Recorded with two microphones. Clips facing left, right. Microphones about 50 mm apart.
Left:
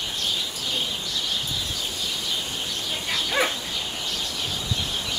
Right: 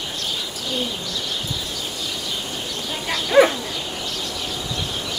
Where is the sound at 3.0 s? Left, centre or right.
Centre.